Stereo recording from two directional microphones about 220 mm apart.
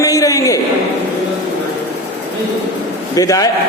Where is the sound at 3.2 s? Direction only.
15° left (ahead or behind).